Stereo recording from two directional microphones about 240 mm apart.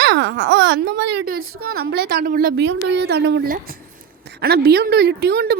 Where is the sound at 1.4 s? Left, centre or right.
Right.